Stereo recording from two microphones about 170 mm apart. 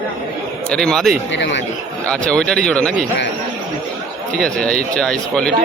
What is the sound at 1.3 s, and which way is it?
Speech, 90° left.